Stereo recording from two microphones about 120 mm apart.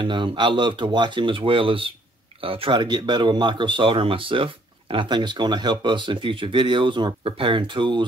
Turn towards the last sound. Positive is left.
turn(degrees=-40)  # may be behind; listen again after turning